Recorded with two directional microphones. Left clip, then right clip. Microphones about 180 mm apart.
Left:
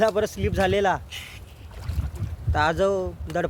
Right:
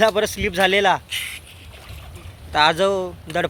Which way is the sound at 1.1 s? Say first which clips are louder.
Right 10 dB; 20° left (ahead or behind).